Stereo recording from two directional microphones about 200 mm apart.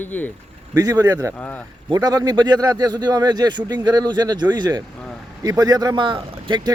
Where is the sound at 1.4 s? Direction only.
10° left (ahead or behind).